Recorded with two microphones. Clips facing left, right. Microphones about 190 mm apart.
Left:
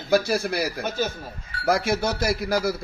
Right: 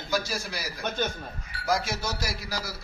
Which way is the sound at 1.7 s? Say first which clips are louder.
Left 6 dB; 60° left (ahead or behind).